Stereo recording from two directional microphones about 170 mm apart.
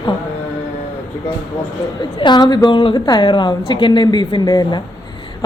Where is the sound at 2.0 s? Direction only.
25° left (ahead or behind).